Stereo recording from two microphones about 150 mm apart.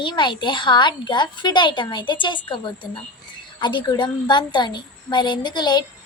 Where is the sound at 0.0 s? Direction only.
30° left (ahead or behind).